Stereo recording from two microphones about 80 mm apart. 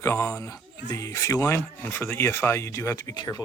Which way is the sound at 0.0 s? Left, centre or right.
Left.